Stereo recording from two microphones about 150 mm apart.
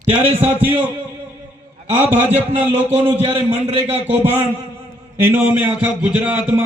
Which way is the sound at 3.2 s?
35° right (ahead or behind).